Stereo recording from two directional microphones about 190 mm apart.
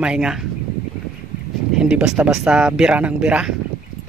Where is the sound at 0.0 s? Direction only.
5° right (ahead or behind).